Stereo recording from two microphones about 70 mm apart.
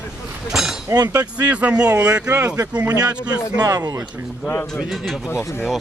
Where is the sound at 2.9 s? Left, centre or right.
Right.